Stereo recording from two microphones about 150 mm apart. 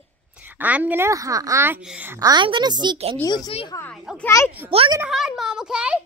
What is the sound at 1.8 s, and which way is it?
Speech, 10° right (ahead or behind).